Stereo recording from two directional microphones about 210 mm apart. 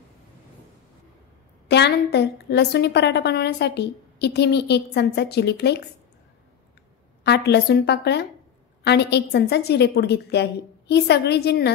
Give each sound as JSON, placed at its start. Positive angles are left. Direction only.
{"t": 1.7, "sound": "a woman's voice", "side_deg": 50}
{"t": 7.2, "sound": "a woman's voice", "side_deg": 50}